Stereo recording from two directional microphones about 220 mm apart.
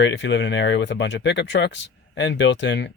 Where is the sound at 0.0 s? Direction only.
55° left (ahead or behind).